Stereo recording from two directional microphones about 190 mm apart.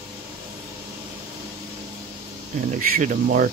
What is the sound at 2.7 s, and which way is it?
Speech, 45° right (ahead or behind).